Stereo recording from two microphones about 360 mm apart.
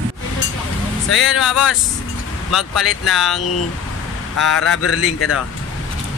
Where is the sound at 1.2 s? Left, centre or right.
Centre.